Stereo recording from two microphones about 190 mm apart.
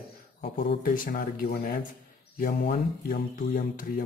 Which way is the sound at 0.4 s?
55° left (ahead or behind).